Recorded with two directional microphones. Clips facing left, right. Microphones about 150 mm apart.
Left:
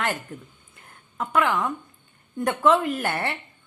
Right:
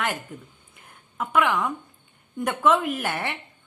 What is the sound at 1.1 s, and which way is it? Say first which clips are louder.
A woman's voice: even; centre (ahead or behind).